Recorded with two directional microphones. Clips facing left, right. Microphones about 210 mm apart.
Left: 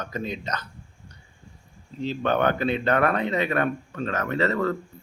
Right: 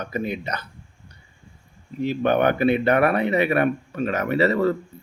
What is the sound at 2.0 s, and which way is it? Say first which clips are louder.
Speech: right 4 dB; 10° right (ahead or behind).